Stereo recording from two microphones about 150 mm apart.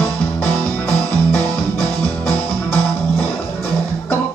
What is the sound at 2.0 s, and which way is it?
Music, 40° left (ahead or behind).